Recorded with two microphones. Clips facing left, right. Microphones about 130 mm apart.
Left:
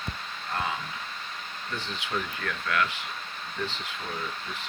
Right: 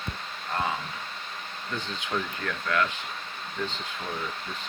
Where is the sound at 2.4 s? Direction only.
25° right (ahead or behind).